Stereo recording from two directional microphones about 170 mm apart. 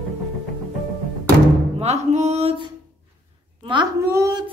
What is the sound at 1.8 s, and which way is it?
Music, 40° right (ahead or behind).